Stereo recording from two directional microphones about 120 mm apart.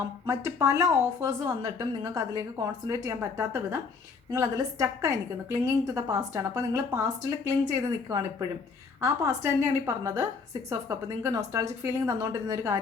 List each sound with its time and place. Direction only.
0.3 s a woman's voice: 25° right (ahead or behind)
3.2 s a woman's voice: 20° right (ahead or behind)